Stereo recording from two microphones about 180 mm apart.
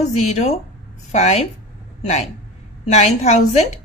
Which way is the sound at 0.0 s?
40° left (ahead or behind).